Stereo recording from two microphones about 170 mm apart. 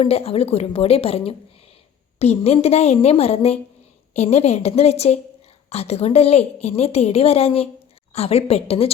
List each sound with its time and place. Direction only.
0.0 s a woman's voice: 35° left (ahead or behind)